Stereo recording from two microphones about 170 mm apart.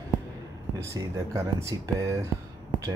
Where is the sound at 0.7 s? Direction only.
20° right (ahead or behind).